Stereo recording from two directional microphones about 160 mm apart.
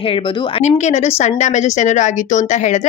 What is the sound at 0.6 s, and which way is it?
Speech, 45° left (ahead or behind).